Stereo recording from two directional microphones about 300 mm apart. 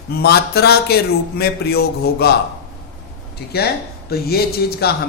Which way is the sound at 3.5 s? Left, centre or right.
Left.